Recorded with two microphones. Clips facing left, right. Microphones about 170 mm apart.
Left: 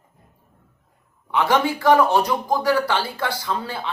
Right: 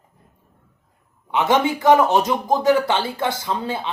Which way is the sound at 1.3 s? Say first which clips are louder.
Right 1 dB; 20° right (ahead or behind).